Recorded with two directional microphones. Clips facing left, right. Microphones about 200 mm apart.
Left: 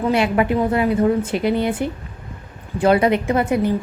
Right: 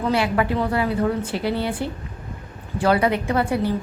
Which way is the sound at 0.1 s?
20° left (ahead or behind).